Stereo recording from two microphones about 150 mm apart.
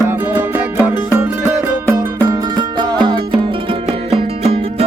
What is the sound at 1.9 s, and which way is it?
Music, 20° right (ahead or behind).